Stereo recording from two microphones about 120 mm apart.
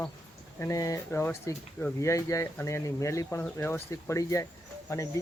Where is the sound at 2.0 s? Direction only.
25° left (ahead or behind).